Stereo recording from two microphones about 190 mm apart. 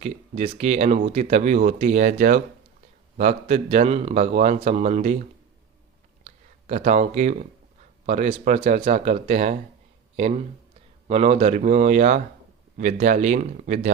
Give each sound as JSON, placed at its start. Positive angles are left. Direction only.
{"t": 0.0, "sound": "speech", "side_deg": -35}
{"t": 6.2, "sound": "speech", "side_deg": -35}